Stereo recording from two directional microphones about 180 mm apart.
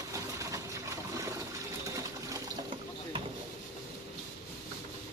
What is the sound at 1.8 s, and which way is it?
Water, 20° right (ahead or behind).